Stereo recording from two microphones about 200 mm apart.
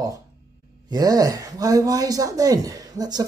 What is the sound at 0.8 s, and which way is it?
Speech, 20° right (ahead or behind).